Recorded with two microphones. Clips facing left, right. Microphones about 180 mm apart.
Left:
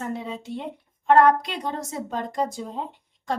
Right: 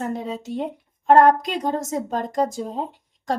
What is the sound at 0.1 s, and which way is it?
A woman's voice, 45° right (ahead or behind).